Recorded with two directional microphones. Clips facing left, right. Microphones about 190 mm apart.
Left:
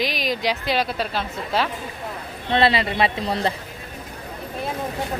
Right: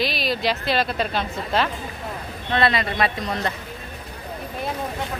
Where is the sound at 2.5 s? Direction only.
30° left (ahead or behind).